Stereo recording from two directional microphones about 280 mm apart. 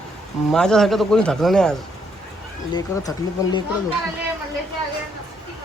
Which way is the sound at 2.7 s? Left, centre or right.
Centre.